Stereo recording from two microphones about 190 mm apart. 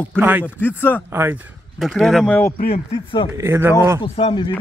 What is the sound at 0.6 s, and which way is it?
Speech, 10° left (ahead or behind).